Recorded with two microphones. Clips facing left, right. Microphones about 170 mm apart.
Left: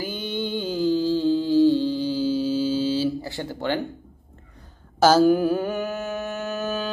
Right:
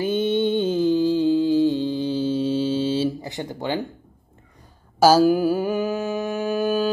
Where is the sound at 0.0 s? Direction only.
25° right (ahead or behind).